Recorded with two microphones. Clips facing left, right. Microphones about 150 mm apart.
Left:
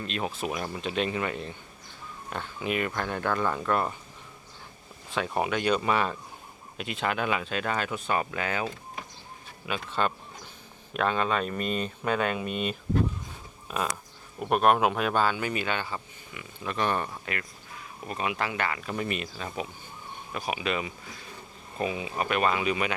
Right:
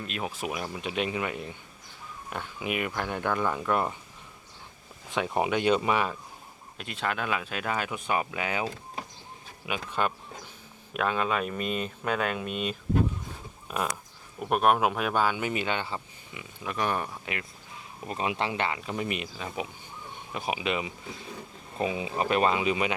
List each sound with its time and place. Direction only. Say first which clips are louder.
0.0 s speech: left 2 dB; 5° right (ahead or behind)
5.1 s speech: right 1 dB; 20° right (ahead or behind)
6.7 s speech: left 2 dB; 5° left (ahead or behind)
18.1 s speech: right 1 dB; 25° right (ahead or behind)